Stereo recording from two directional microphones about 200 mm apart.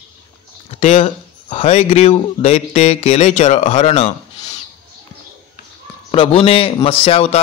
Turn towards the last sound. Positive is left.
turn(degrees=30)  # may be behind; listen again after turning